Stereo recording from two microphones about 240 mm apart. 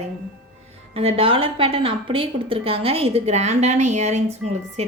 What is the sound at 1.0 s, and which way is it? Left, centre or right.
A woman's voice, right.